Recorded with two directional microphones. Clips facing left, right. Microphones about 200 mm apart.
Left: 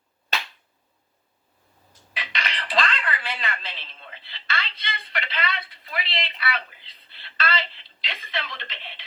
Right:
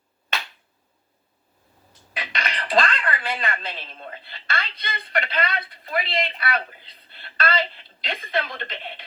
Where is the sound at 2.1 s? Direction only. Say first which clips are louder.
Right 3 dB; 50° right (ahead or behind).